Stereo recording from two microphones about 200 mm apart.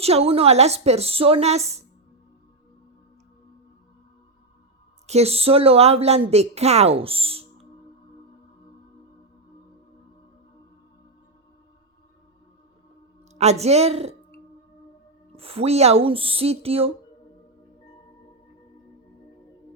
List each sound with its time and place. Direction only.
0.0 s a woman's voice: 30° right (ahead or behind)
5.0 s a woman's voice: 30° right (ahead or behind)
13.4 s a woman's voice: 35° right (ahead or behind)